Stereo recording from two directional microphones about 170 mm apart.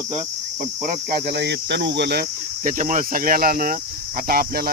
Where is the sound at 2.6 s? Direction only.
50° right (ahead or behind).